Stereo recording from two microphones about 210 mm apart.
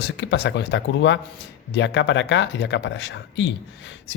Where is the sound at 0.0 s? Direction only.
55° left (ahead or behind).